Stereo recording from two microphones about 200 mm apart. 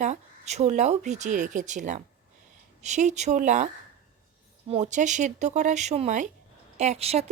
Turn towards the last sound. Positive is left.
turn(degrees=-30)  # may be behind; listen again after turning